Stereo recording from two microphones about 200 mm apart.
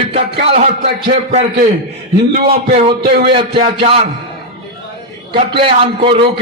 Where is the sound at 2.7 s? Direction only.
30° right (ahead or behind).